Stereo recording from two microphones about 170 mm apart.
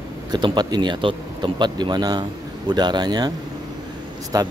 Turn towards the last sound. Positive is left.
turn(degrees=-20)  # may be behind; listen again after turning